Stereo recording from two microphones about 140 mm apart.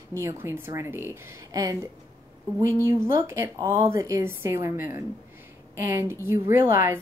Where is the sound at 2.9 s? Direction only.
20° right (ahead or behind).